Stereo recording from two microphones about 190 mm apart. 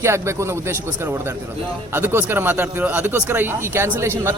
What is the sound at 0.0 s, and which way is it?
Speech, 15° right (ahead or behind).